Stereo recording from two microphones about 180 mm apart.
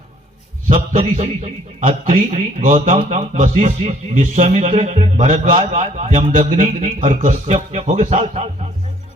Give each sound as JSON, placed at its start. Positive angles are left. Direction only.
{"t": 0.7, "sound": "a man's voice", "side_deg": -40}